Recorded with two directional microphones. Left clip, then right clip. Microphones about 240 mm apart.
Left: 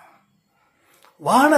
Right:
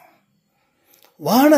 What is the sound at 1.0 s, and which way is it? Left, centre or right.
Speech, right.